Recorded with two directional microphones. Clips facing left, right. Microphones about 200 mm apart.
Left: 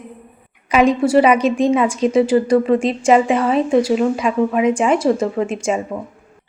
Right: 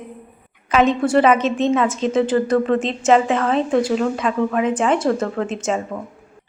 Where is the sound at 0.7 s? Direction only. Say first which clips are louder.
Left 2 dB; 10° left (ahead or behind).